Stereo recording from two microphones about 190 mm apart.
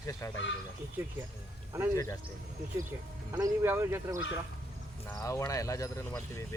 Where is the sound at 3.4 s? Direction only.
15° right (ahead or behind).